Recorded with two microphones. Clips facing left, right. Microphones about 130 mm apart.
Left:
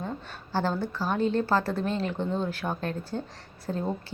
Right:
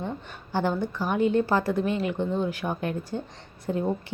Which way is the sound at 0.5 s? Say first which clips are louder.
Right 2 dB; 15° right (ahead or behind).